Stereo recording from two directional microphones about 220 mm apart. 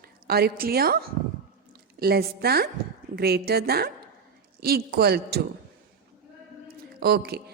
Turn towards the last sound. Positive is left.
turn(degrees=-45)  # may be behind; listen again after turning